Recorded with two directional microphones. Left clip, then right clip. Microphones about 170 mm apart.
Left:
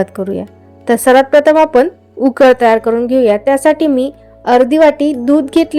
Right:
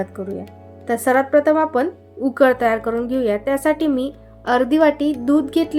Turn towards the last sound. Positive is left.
turn(degrees=45)  # may be behind; listen again after turning